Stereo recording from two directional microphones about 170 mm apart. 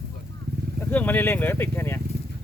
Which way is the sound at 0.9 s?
10° left (ahead or behind).